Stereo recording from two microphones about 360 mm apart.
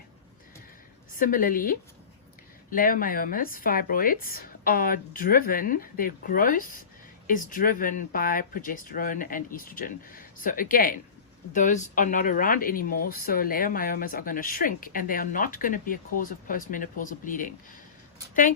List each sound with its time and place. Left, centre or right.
1.1 s speech: left